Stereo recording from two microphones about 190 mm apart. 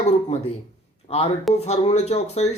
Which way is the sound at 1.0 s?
30° left (ahead or behind).